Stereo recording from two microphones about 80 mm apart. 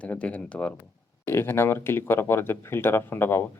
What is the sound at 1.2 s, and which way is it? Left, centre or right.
Speech, left.